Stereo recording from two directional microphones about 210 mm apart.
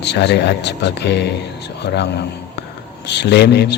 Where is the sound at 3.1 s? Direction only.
55° left (ahead or behind).